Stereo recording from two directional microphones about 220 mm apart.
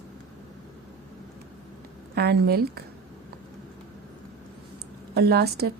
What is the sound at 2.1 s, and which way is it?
Speech, 45° right (ahead or behind).